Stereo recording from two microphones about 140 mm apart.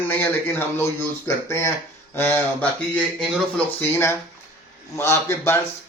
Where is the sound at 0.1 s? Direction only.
15° left (ahead or behind).